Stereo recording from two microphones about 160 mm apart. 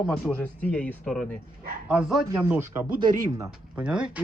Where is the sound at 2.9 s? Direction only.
30° right (ahead or behind).